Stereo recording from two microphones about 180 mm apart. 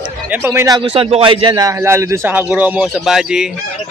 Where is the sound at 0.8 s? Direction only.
30° right (ahead or behind).